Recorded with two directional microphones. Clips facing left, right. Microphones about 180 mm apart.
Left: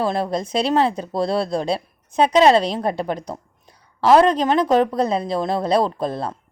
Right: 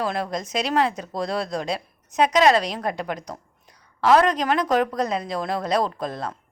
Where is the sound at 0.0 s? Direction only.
30° left (ahead or behind).